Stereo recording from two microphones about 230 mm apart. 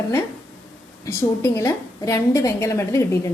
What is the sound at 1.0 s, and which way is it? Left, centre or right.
A woman's voice, centre.